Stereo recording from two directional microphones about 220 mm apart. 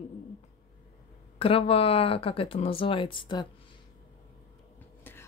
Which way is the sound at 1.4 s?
25° left (ahead or behind).